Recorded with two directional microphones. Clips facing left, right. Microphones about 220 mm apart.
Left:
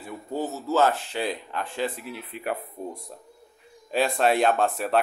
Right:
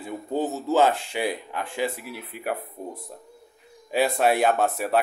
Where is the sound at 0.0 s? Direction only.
15° right (ahead or behind).